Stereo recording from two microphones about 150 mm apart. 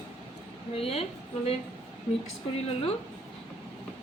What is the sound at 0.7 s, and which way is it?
Speech, 40° left (ahead or behind).